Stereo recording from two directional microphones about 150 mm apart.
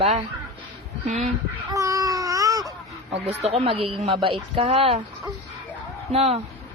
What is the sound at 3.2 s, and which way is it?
Speech, 40° right (ahead or behind).